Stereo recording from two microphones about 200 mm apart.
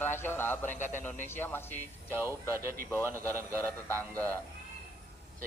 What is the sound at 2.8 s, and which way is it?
Speech, 10° left (ahead or behind).